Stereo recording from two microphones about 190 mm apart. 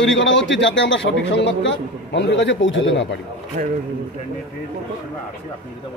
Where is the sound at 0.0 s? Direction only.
75° left (ahead or behind).